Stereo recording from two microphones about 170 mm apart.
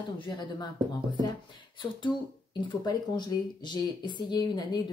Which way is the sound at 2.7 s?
25° left (ahead or behind).